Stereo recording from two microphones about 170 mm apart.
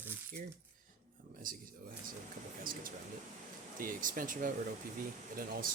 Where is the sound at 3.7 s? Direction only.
55° right (ahead or behind).